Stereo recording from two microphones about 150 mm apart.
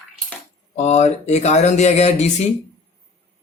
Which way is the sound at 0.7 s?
50° left (ahead or behind).